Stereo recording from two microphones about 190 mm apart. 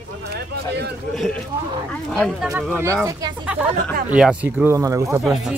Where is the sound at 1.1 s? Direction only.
Centre (ahead or behind).